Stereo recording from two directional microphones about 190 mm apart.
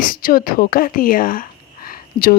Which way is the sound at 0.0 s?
50° left (ahead or behind).